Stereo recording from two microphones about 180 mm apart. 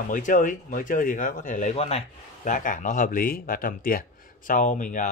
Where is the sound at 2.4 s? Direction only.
45° left (ahead or behind).